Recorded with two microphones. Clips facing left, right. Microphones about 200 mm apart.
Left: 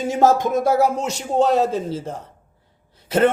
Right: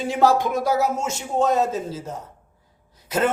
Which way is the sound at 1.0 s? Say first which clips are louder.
Left 3 dB; 70° left (ahead or behind).